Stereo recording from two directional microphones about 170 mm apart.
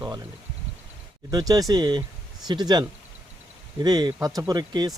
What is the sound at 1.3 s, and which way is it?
Speech, 20° right (ahead or behind).